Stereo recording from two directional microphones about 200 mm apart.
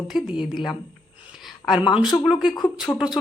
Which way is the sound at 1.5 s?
Centre (ahead or behind).